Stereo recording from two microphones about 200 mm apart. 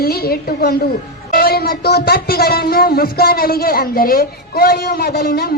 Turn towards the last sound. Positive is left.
turn(degrees=50)  # may be behind; listen again after turning